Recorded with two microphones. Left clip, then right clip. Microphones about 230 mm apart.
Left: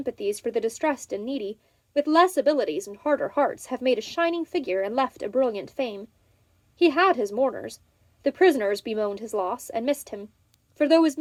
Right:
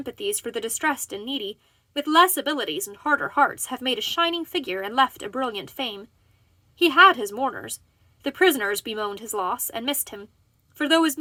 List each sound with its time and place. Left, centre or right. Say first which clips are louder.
0.0 s speech: left 2 dB; right